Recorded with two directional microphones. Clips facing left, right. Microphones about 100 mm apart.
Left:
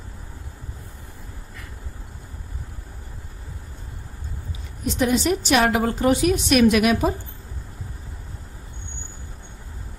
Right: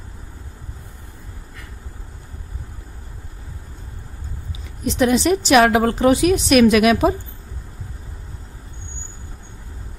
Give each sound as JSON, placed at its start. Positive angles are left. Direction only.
{"t": 4.8, "sound": "a woman's voice", "side_deg": -90}